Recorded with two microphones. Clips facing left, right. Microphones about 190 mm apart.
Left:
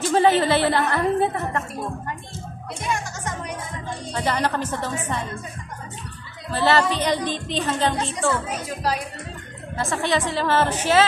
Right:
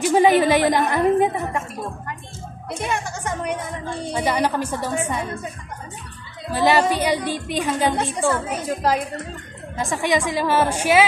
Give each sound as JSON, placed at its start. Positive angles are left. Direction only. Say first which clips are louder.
{"t": 0.0, "sound": "speech", "louder": "right 3 dB", "side_deg": -15}
{"t": 2.9, "sound": "speech", "louder": "even", "side_deg": -60}
{"t": 4.1, "sound": "speech", "louder": "right 2 dB", "side_deg": -10}
{"t": 6.5, "sound": "speech", "louder": "right 2 dB", "side_deg": -15}
{"t": 9.8, "sound": "speech", "louder": "right 2 dB", "side_deg": -15}